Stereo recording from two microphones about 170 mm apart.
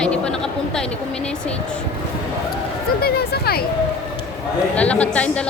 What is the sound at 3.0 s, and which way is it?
Speech, 65° left (ahead or behind).